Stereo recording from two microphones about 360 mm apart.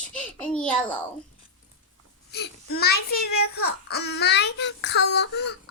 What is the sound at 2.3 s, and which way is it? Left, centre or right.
A child's voice, left.